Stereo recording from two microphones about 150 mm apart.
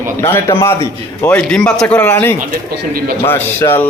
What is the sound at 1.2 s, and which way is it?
A man's voice, 5° left (ahead or behind).